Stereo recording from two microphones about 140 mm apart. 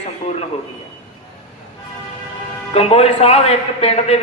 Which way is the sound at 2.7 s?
45° left (ahead or behind).